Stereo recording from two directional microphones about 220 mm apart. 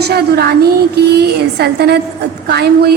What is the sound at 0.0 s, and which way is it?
A woman's voice, 45° right (ahead or behind).